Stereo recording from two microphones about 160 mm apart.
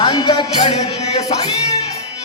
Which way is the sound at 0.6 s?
40° left (ahead or behind).